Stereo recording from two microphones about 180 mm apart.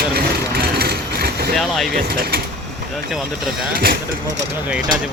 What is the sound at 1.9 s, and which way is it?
Speech, 55° right (ahead or behind).